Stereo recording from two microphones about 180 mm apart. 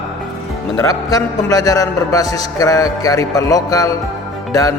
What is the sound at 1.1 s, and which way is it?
A man's voice, 20° left (ahead or behind).